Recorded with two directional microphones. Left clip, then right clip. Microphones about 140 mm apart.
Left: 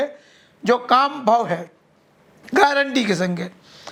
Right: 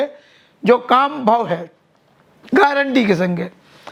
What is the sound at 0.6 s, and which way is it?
A man's voice, 35° right (ahead or behind).